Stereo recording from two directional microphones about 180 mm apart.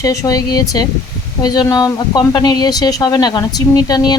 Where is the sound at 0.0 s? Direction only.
20° left (ahead or behind).